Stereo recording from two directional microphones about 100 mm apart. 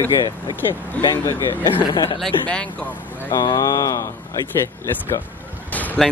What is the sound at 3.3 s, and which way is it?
Speech, 40° left (ahead or behind).